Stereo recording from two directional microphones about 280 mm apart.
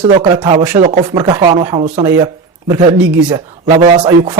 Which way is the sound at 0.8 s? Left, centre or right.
Right.